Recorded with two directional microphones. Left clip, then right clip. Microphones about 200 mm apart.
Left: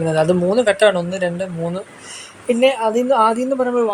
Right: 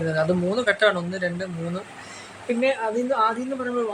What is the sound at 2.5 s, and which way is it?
Speech, 35° left (ahead or behind).